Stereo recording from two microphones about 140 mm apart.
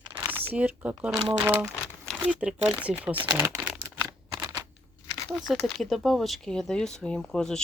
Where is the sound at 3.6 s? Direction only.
15° right (ahead or behind).